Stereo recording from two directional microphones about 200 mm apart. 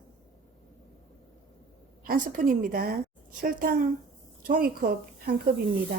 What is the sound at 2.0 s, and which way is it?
Speech, 45° right (ahead or behind).